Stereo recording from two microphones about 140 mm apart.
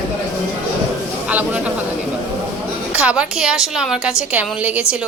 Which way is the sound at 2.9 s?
10° right (ahead or behind).